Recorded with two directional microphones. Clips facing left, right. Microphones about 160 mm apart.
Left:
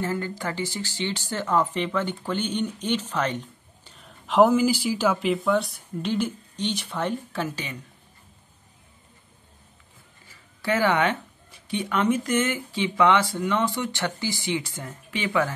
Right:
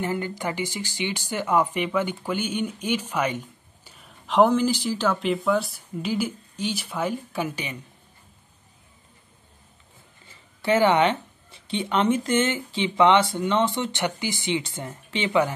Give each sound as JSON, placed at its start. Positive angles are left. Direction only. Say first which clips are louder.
{"t": 0.0, "sound": "speech", "louder": "right 1 dB", "side_deg": -20}
{"t": 10.2, "sound": "speech", "louder": "right 3 dB", "side_deg": -25}